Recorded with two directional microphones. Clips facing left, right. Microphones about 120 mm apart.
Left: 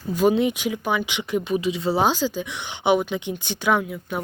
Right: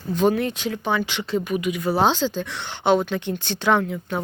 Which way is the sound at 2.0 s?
10° left (ahead or behind).